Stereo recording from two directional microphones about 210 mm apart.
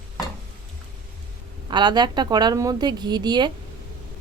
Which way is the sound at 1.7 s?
20° right (ahead or behind).